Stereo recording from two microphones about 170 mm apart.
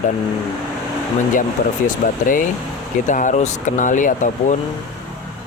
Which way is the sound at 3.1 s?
45° left (ahead or behind).